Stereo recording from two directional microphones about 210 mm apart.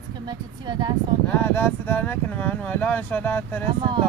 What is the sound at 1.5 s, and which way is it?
Speech, 10° left (ahead or behind).